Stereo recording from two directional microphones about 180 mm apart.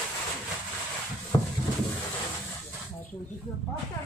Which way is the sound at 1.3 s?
25° left (ahead or behind).